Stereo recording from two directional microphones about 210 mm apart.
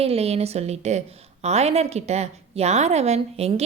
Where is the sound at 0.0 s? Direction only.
30° right (ahead or behind).